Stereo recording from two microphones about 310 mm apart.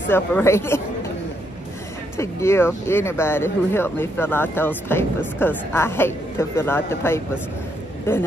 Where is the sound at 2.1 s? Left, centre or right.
Centre.